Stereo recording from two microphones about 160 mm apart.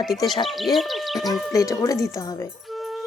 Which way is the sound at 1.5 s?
20° left (ahead or behind).